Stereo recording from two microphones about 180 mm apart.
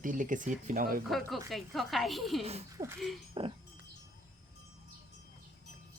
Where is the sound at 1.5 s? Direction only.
Centre (ahead or behind).